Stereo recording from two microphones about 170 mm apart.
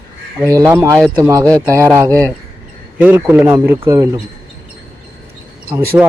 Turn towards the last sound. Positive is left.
turn(degrees=-5)  # may be behind; listen again after turning